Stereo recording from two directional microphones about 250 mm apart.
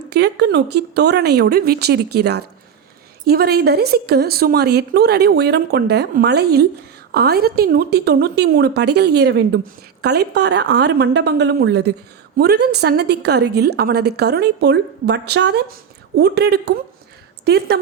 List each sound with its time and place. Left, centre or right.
0.1 s a woman's voice: right